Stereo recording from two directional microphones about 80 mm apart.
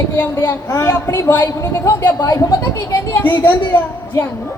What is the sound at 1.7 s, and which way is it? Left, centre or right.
Speech, left.